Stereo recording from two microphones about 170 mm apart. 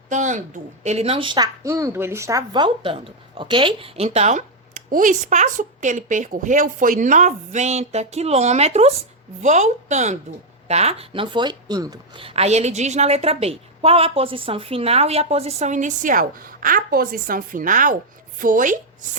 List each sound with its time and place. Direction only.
0.1 s a woman's voice: 45° right (ahead or behind)